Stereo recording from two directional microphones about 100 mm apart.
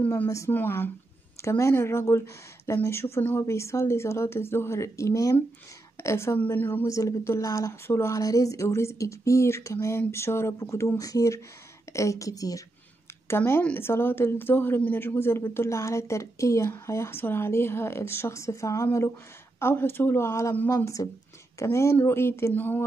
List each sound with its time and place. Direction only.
0.5 s speech: 20° left (ahead or behind)
6.9 s speech: 30° left (ahead or behind)
13.4 s speech: 15° left (ahead or behind)